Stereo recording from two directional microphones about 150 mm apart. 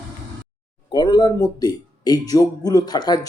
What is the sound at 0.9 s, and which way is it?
A man's voice, 30° left (ahead or behind).